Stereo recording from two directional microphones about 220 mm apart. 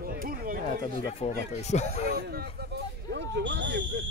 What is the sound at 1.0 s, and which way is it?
Speech, 25° left (ahead or behind).